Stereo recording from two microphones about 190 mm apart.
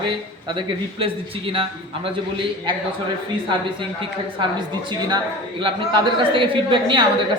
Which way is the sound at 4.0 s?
25° right (ahead or behind).